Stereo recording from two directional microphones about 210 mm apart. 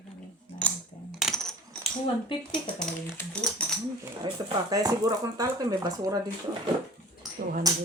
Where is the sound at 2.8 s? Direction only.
5° left (ahead or behind).